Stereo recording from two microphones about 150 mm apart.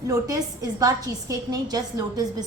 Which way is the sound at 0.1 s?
25° right (ahead or behind).